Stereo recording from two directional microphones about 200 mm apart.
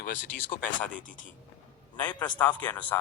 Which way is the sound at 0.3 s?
10° left (ahead or behind).